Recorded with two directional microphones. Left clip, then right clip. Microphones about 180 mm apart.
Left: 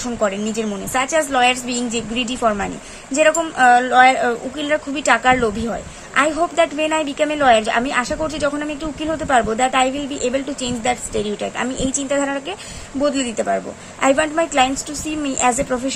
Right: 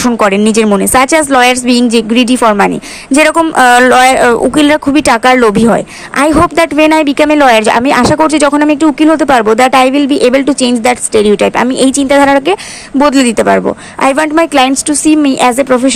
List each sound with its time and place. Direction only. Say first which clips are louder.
0.0 s a woman's voice: right 12 dB; 40° right (ahead or behind)